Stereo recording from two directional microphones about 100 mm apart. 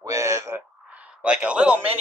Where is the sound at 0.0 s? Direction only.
30° right (ahead or behind).